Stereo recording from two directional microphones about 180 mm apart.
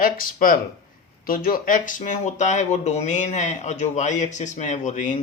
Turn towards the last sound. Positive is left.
turn(degrees=45)  # may be behind; listen again after turning